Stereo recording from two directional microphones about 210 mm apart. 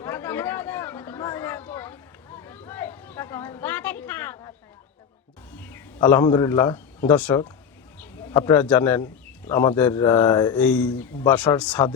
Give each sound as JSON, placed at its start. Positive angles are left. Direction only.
{"t": 0.0, "sound": "chatter", "side_deg": 10}
{"t": 5.5, "sound": "a sound", "side_deg": 10}
{"t": 6.2, "sound": "speech", "side_deg": 15}
{"t": 10.6, "sound": "speech", "side_deg": 5}